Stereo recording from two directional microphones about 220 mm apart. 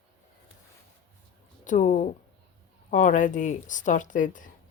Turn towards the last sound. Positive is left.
turn(degrees=35)  # may be behind; listen again after turning